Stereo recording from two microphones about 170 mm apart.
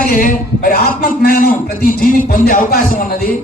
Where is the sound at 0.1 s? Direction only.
55° left (ahead or behind).